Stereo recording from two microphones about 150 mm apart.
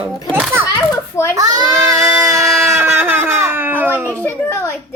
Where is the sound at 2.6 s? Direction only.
15° right (ahead or behind).